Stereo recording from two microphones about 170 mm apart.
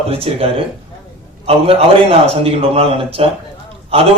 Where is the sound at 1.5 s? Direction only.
35° right (ahead or behind).